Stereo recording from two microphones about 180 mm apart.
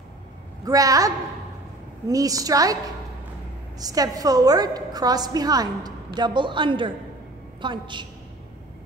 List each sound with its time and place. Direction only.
0.7 s a woman's voice: 20° right (ahead or behind)
3.8 s a woman's voice: 20° right (ahead or behind)